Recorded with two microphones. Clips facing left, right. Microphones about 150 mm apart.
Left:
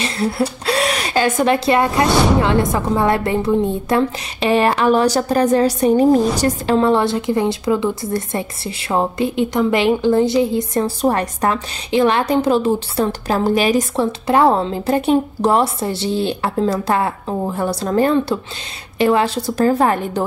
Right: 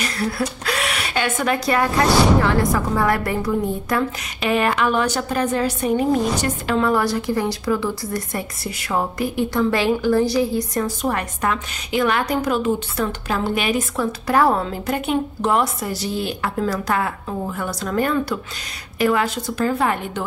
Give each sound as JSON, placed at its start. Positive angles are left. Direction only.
{"t": 0.0, "sound": "a woman's voice", "side_deg": 25}
{"t": 14.2, "sound": "a woman's voice", "side_deg": 25}